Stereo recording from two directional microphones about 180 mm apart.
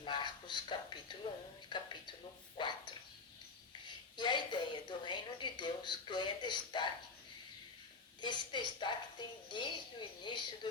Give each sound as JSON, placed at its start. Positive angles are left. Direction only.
{"t": 0.0, "sound": "speech", "side_deg": 25}
{"t": 1.7, "sound": "a sound", "side_deg": 25}
{"t": 4.2, "sound": "a woman's voice", "side_deg": 25}
{"t": 8.2, "sound": "speech", "side_deg": 25}